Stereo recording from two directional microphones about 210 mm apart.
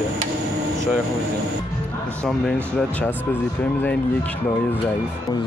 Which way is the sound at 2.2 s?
5° left (ahead or behind).